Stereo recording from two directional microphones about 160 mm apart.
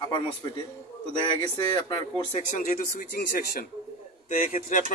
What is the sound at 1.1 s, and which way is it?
A man's voice, 30° left (ahead or behind).